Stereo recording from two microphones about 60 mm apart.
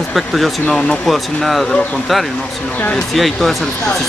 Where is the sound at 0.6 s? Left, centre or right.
Centre.